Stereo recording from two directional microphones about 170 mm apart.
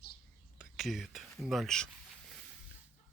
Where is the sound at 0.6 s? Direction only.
Centre (ahead or behind).